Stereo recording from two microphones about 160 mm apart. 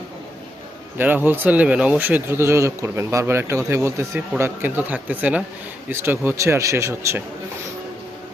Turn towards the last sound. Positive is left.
turn(degrees=-15)  # may be behind; listen again after turning